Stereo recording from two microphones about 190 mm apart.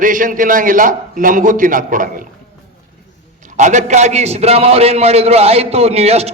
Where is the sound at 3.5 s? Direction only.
40° right (ahead or behind).